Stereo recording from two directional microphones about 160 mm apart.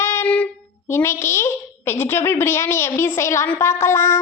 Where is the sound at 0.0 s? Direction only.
15° left (ahead or behind).